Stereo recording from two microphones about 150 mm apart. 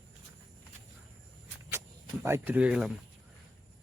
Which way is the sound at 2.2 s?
15° right (ahead or behind).